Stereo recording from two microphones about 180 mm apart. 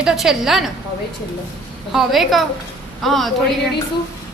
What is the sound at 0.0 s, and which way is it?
Speech, centre (ahead or behind).